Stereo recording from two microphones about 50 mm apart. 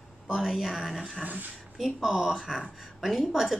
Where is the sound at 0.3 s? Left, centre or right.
Centre.